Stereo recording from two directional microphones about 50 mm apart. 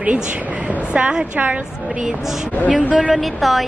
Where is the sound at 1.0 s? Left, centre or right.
Right.